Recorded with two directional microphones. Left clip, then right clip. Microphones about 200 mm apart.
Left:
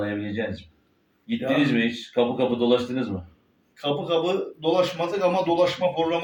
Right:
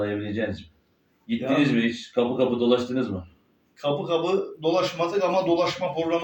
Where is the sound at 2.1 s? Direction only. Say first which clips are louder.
Even; 15° left (ahead or behind).